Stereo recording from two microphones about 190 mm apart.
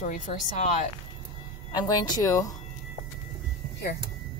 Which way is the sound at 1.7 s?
20° left (ahead or behind).